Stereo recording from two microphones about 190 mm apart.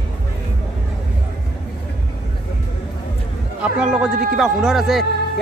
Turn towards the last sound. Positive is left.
turn(degrees=0)  # may be behind; listen again after turning